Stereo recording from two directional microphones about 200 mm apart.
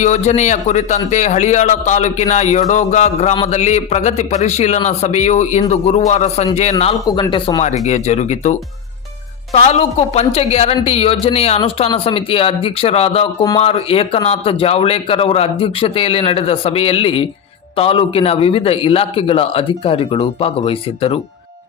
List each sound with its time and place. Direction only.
0.0 s a man's voice: 35° left (ahead or behind)